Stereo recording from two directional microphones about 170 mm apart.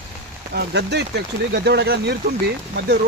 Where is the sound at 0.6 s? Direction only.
80° right.